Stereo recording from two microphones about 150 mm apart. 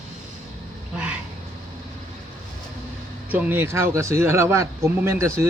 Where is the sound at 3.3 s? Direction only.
10° right (ahead or behind).